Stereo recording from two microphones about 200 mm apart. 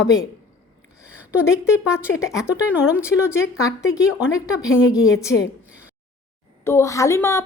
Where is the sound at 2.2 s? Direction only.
15° left (ahead or behind).